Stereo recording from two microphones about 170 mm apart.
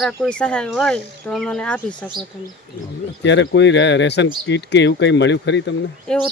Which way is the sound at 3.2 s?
90° left.